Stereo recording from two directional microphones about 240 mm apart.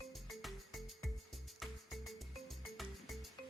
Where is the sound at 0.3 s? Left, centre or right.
Centre.